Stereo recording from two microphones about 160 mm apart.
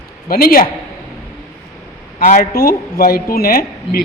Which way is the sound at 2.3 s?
60° left (ahead or behind).